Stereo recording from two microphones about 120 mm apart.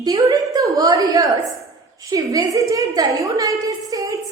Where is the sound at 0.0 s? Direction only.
30° right (ahead or behind).